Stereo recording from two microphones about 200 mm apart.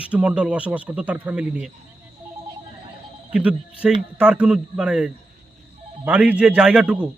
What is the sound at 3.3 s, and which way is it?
A man's voice, 5° right (ahead or behind).